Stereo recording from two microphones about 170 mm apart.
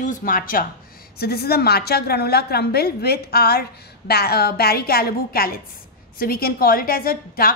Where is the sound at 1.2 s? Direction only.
65° left (ahead or behind).